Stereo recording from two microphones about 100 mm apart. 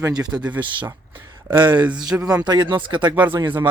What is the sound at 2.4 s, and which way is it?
Speech, 45° right (ahead or behind).